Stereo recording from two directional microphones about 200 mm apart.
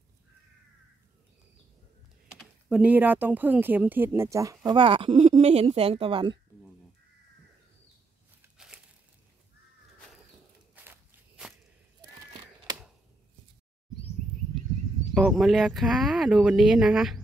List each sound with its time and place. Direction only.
2.3 s speech: 5° right (ahead or behind); by 6.3 s 25° right (ahead or behind)
8.5 s crumpling: 5° right (ahead or behind)
10.7 s walk: 10° right (ahead or behind)
15.1 s speech: 5° right (ahead or behind)